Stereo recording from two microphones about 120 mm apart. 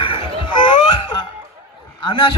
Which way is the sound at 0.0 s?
45° left (ahead or behind).